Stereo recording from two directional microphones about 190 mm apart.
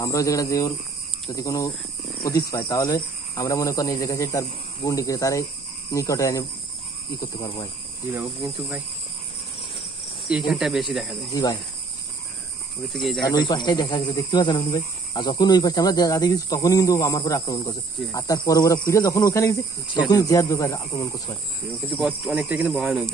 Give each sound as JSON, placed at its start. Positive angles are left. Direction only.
{"t": 0.0, "sound": "speech", "side_deg": 15}
{"t": 8.1, "sound": "speech", "side_deg": -5}
{"t": 10.3, "sound": "speech", "side_deg": -5}
{"t": 12.9, "sound": "speech", "side_deg": 0}
{"t": 13.3, "sound": "speech", "side_deg": 20}
{"t": 21.6, "sound": "speech", "side_deg": -10}